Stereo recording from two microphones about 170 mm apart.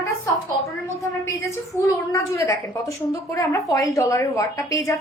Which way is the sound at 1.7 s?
20° left (ahead or behind).